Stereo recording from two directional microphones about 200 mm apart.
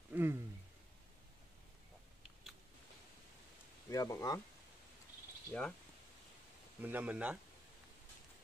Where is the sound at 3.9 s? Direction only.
20° left (ahead or behind).